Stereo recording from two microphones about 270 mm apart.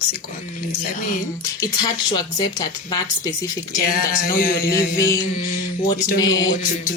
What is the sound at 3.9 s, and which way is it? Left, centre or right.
Music, left.